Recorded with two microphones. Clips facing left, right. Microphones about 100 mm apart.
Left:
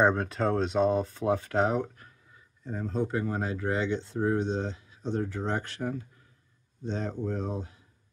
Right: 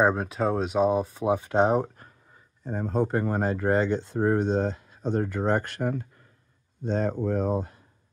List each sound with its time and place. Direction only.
0.0 s speech: 5° right (ahead or behind); by 1.8 s 25° right (ahead or behind)
1.8 s speech: 40° right (ahead or behind)